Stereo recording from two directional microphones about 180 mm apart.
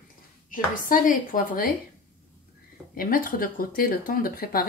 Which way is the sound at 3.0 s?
50° left (ahead or behind).